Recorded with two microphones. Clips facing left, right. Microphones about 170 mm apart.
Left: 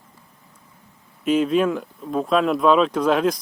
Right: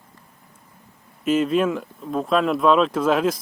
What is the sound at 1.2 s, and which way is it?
Speech, centre (ahead or behind).